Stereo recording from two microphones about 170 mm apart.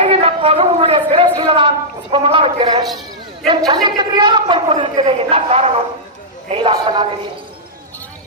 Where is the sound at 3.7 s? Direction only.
25° right (ahead or behind).